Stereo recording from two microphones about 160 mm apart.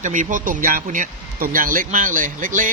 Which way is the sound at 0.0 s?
50° right (ahead or behind).